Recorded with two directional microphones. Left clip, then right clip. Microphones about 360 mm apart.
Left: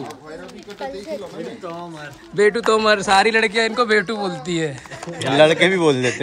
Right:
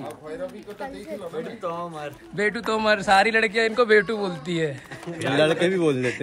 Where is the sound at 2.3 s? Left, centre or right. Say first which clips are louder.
Left 9 dB; centre.